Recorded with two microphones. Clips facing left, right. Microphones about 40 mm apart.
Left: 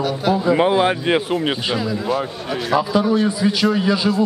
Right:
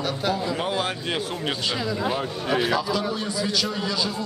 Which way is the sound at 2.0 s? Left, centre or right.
Centre.